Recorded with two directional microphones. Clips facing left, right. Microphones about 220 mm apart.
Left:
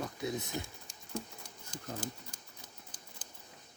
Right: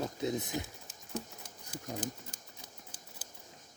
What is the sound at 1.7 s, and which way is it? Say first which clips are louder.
Speech: right 3 dB; 5° right (ahead or behind).